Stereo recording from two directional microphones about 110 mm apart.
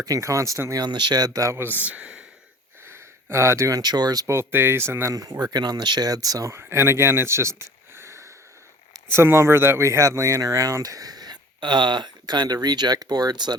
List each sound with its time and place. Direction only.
0.0 s speech: 30° right (ahead or behind); by 2.2 s 10° right (ahead or behind)
2.8 s speech: 25° right (ahead or behind)
4.4 s speech: 20° right (ahead or behind)
7.9 s a sound: 25° right (ahead or behind)
9.1 s speech: 25° right (ahead or behind); by 13.6 s 40° right (ahead or behind)